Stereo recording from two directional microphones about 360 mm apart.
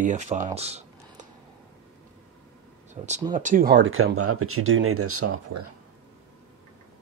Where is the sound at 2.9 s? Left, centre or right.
Centre; by 5.6 s right.